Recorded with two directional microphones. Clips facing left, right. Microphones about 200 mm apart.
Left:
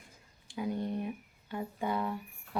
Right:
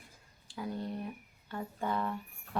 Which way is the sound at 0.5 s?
20° left (ahead or behind).